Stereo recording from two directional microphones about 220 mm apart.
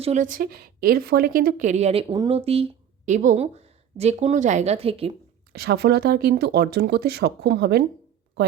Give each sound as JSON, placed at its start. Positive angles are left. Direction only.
{"t": 0.0, "sound": "a woman's voice", "side_deg": -30}
{"t": 5.5, "sound": "speech", "side_deg": -45}